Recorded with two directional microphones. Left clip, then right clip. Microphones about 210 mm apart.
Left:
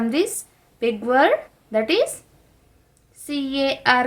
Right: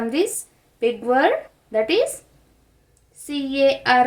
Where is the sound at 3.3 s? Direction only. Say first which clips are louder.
Right 4 dB; 25° left (ahead or behind).